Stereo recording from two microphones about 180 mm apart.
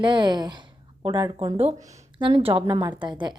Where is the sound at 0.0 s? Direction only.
25° right (ahead or behind).